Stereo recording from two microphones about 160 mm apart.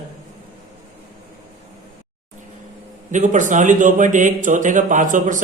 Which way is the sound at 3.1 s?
50° right (ahead or behind).